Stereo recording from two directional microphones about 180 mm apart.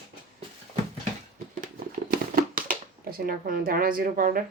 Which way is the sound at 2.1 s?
55° right (ahead or behind).